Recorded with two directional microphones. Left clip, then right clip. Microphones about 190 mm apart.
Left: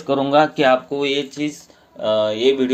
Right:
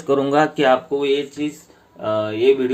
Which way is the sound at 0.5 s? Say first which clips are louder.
Even; 20° left (ahead or behind).